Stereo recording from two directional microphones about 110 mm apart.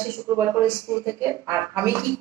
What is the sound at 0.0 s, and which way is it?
A woman's voice, 25° right (ahead or behind).